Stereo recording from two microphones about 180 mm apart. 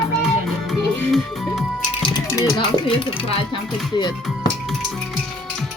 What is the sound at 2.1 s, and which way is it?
Music, 20° left (ahead or behind).